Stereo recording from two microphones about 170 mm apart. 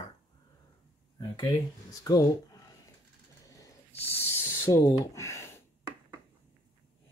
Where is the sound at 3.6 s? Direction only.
10° left (ahead or behind).